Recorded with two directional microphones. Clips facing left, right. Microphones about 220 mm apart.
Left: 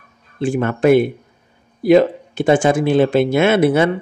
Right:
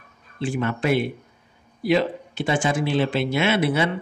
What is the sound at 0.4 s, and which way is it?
Speech, 50° left (ahead or behind).